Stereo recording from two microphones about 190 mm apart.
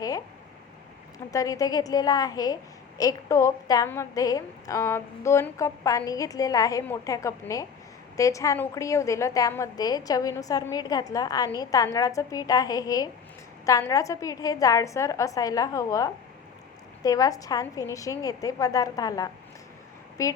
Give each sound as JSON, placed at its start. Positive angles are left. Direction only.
{"t": 1.3, "sound": "a woman's voice", "side_deg": 20}